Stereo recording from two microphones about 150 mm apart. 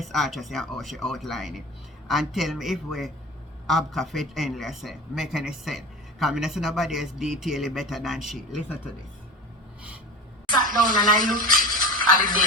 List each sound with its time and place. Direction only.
0.0 s a man's voice: centre (ahead or behind)
10.6 s a sound: 65° right (ahead or behind)
11.2 s speech: 65° right (ahead or behind)